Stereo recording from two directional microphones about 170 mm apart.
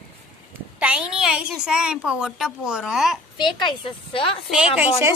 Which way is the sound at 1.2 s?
5° right (ahead or behind).